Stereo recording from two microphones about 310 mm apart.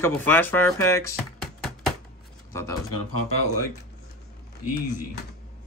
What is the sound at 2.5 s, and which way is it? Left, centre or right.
Speech, centre.